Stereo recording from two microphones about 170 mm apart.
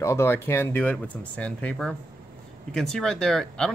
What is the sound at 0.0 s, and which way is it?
Speech, 15° left (ahead or behind).